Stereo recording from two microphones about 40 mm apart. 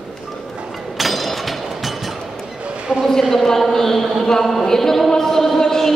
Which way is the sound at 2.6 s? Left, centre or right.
Right.